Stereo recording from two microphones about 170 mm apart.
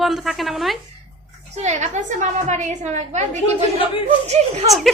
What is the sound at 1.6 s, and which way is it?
A woman's voice, 45° right (ahead or behind).